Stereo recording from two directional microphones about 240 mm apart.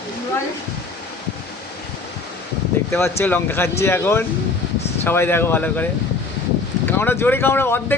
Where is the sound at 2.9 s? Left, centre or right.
Centre.